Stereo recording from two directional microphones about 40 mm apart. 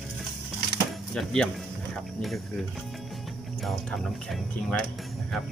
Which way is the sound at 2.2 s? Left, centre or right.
Centre.